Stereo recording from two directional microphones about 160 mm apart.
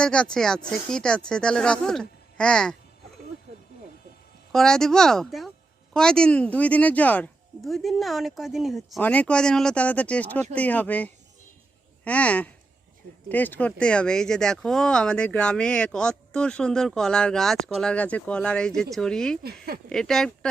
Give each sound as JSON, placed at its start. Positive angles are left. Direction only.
{"t": 0.0, "sound": "speech", "side_deg": 5}
{"t": 4.5, "sound": "speech", "side_deg": 5}
{"t": 9.0, "sound": "speech", "side_deg": 10}
{"t": 19.4, "sound": "speech", "side_deg": -70}
{"t": 19.9, "sound": "speech", "side_deg": 5}